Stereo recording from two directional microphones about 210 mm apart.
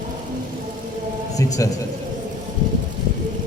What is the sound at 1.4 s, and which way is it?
Speech, 15° left (ahead or behind).